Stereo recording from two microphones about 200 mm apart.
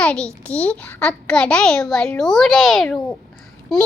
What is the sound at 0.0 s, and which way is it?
A child's voice, 5° left (ahead or behind).